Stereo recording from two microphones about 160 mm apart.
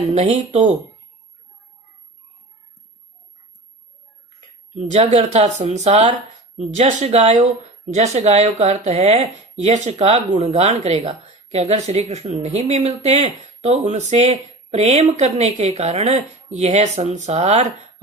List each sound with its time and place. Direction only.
0.1 s speech: 45° right (ahead or behind)
4.9 s speech: 45° right (ahead or behind)